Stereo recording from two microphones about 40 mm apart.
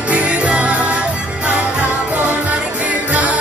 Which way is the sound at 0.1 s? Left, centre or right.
Right.